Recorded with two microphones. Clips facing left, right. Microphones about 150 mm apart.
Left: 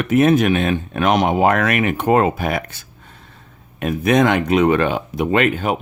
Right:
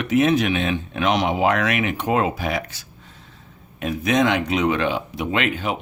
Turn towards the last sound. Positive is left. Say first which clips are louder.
# left 6 dB
turn(degrees=50)  # may be behind; listen again after turning